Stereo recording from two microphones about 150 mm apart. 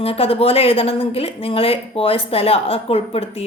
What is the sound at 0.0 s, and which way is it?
A woman's voice, 40° left (ahead or behind).